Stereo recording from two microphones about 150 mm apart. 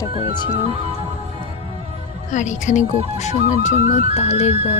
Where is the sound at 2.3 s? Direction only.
55° left (ahead or behind).